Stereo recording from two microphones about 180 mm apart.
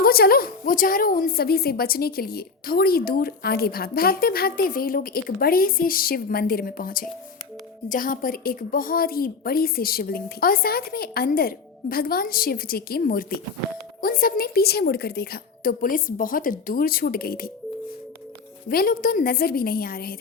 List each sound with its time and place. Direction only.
0.0 s a woman's voice: 55° left (ahead or behind)
18.7 s a woman's voice: 55° left (ahead or behind)